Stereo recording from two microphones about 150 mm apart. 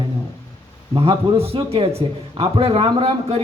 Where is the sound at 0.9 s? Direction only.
35° right (ahead or behind).